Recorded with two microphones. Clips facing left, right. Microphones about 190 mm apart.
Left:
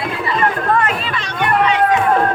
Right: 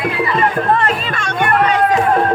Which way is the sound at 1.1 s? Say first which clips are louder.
Right 1 dB; 50° right (ahead or behind).